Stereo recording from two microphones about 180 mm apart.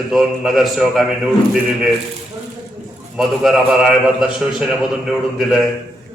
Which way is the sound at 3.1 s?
Centre (ahead or behind).